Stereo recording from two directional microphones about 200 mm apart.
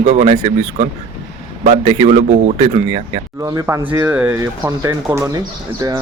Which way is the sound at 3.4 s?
15° right (ahead or behind).